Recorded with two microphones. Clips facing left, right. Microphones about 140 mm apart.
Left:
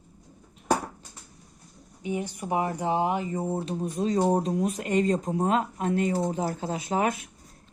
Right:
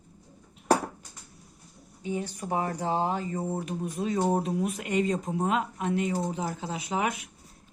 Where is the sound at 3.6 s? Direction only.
30° left (ahead or behind).